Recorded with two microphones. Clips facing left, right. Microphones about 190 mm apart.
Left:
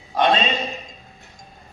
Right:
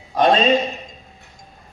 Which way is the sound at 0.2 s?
40° right (ahead or behind).